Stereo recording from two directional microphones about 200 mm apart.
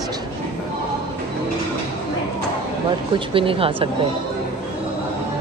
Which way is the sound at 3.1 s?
25° right (ahead or behind).